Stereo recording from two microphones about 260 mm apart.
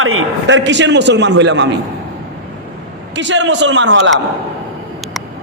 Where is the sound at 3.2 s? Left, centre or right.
Right.